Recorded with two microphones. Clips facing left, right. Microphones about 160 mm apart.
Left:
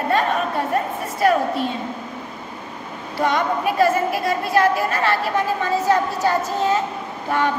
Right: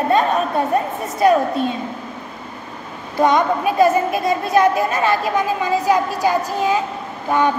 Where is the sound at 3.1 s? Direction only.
20° right (ahead or behind).